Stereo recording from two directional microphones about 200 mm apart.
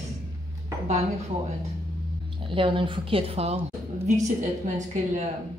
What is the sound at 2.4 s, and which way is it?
A woman's voice, 25° right (ahead or behind).